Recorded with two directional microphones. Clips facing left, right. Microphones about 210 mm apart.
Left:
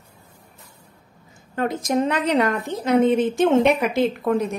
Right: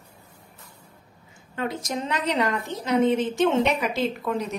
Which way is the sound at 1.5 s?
50° left (ahead or behind).